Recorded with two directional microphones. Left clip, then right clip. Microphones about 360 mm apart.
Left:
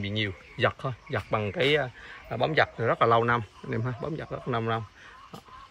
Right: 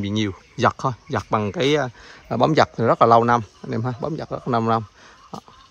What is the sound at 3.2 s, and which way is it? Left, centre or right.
Speech, centre.